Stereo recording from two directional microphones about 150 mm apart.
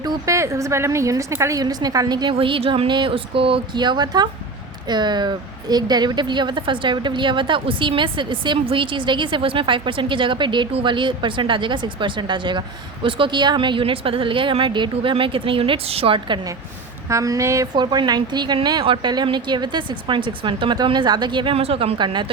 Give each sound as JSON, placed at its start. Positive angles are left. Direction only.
{"t": 0.0, "sound": "a woman's voice", "side_deg": -20}